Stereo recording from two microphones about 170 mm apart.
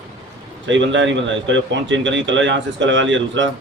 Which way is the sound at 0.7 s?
90° right.